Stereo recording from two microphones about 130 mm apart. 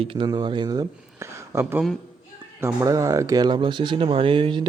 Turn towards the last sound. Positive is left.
turn(degrees=-40)  # may be behind; listen again after turning